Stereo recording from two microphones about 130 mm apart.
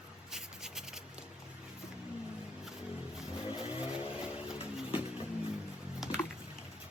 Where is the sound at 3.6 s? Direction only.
40° left (ahead or behind).